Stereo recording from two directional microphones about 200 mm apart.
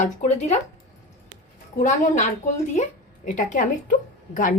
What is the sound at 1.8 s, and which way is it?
Speech, 35° left (ahead or behind).